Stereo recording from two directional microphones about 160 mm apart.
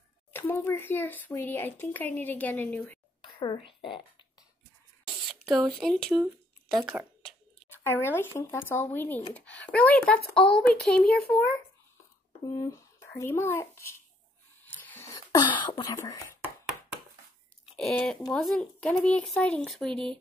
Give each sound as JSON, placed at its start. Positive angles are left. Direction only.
{"t": 0.3, "sound": "speech", "side_deg": 10}
{"t": 3.2, "sound": "a woman's voice", "side_deg": 30}
{"t": 5.0, "sound": "speech", "side_deg": 0}
{"t": 6.2, "sound": "speech", "side_deg": -10}
{"t": 7.7, "sound": "speech", "side_deg": 15}
{"t": 12.5, "sound": "speech", "side_deg": 20}
{"t": 14.6, "sound": "whispering", "side_deg": 10}
{"t": 17.7, "sound": "speech", "side_deg": 5}